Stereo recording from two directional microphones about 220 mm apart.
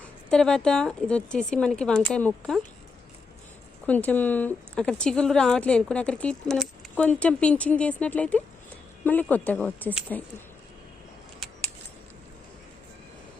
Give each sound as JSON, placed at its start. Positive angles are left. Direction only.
{"t": 0.0, "sound": "speech", "side_deg": 5}
{"t": 3.8, "sound": "speech", "side_deg": 5}